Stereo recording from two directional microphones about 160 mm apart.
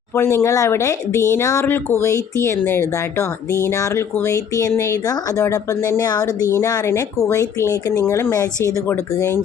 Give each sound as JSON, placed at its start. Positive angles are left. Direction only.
{"t": 0.1, "sound": "speech", "side_deg": 15}